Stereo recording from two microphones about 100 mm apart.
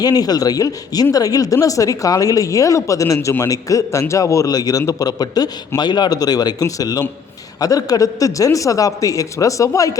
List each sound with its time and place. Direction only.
0.0 s a man's voice: 40° left (ahead or behind)